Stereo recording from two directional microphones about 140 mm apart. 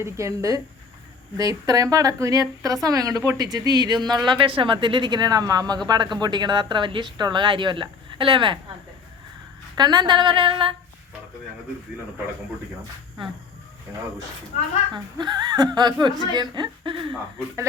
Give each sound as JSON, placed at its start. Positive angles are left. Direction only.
{"t": 0.0, "sound": "speech", "side_deg": -20}
{"t": 9.7, "sound": "speech", "side_deg": -30}
{"t": 13.2, "sound": "speech", "side_deg": -35}
{"t": 14.9, "sound": "speech", "side_deg": -30}